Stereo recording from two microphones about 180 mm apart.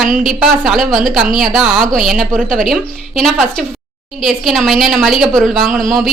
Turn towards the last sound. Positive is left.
turn(degrees=0)  # may be behind; listen again after turning